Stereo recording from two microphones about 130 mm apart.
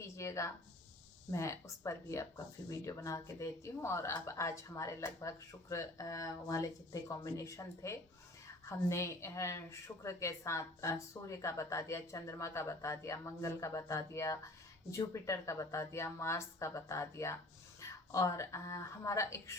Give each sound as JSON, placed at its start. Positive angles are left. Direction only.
{"t": 0.2, "sound": "a woman's voice", "side_deg": 20}